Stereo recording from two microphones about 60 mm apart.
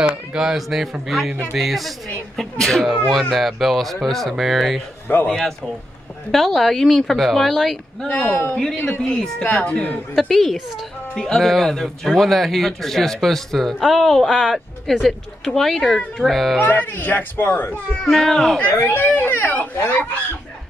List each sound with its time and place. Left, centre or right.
0.3 s a man's voice: centre
5.1 s speech: left
6.3 s a man's voice: centre
8.1 s a woman's voice: left
9.0 s speech: centre
9.4 s a woman's voice: left
10.2 s a man's voice: centre
16.5 s speech: left
18.0 s speech: centre
18.6 s speech: left